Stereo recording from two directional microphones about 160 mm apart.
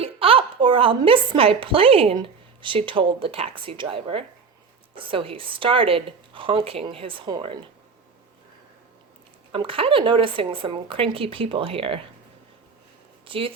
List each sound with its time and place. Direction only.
0.0 s a woman's voice: 35° right (ahead or behind)
9.5 s a woman's voice: 35° right (ahead or behind)
13.2 s speech: 35° right (ahead or behind)